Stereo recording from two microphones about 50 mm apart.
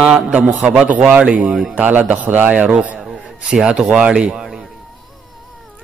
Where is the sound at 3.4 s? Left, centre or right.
Centre.